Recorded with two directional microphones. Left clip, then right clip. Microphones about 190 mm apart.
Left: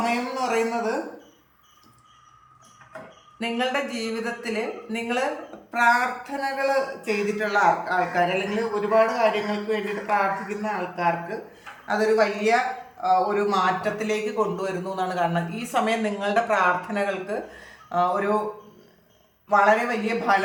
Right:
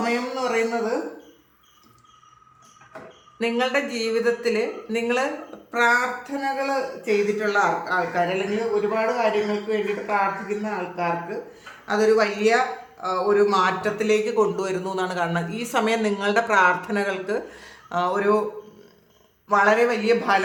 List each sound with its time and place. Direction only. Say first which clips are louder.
0.0 s a sound: right 1 dB; 15° right (ahead or behind)
3.3 s speech: right 3 dB; 25° right (ahead or behind)
11.9 s speech: right 2 dB; 25° right (ahead or behind)
19.5 s speech: right 1 dB; 25° right (ahead or behind)